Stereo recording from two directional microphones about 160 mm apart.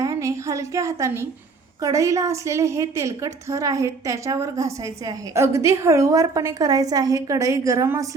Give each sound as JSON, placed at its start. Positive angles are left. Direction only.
{"t": 0.0, "sound": "a woman's voice", "side_deg": -20}